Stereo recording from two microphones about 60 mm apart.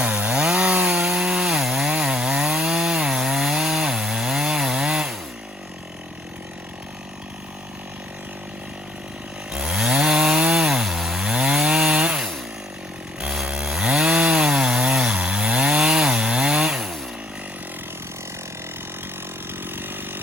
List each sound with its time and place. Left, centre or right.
0.0 s chainsaw: right
0.9 s wood: centre
1.9 s chainsaw: centre
9.5 s chainsaw: centre
13.3 s chainsaw: centre
19.7 s chainsaw: right